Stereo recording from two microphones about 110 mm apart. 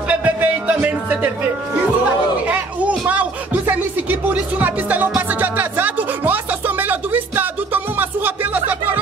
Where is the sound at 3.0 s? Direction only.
15° right (ahead or behind).